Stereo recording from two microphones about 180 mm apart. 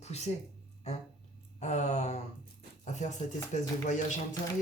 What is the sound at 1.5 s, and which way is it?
Speech, 40° left (ahead or behind).